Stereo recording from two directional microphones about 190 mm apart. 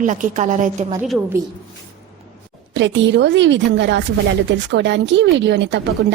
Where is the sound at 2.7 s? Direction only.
70° right (ahead or behind).